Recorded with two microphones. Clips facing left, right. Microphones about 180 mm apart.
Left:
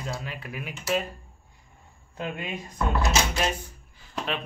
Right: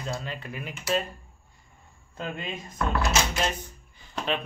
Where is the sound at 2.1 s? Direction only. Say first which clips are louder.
Left 1 dB; 15° left (ahead or behind).